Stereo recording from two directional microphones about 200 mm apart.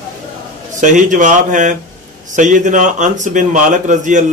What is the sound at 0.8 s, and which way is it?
A man's voice, 40° right (ahead or behind).